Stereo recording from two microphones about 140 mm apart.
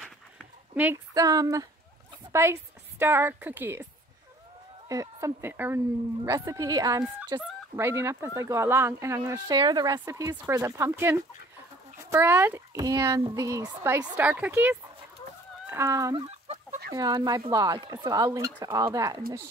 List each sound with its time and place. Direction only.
1.1 s a woman's voice: 25° right (ahead or behind)
4.8 s a woman's voice: 25° right (ahead or behind)
14.1 s a woman's voice: 10° right (ahead or behind)
16.3 s chicken: 50° right (ahead or behind)
16.9 s speech: 30° right (ahead or behind)